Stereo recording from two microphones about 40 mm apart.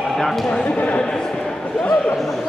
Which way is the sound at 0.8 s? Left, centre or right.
Left.